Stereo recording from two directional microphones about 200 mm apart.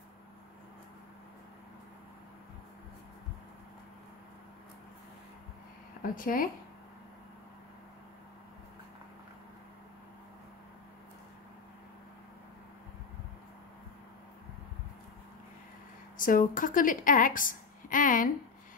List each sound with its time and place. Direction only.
6.0 s speech: 45° left (ahead or behind)
16.2 s a woman's voice: 40° left (ahead or behind)